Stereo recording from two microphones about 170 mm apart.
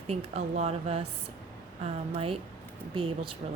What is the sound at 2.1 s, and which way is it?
Speech, 35° right (ahead or behind).